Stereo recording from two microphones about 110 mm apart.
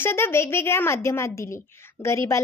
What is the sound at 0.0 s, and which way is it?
A woman's voice, 20° left (ahead or behind).